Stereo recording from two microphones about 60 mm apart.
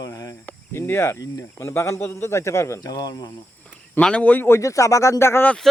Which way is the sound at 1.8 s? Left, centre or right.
Left.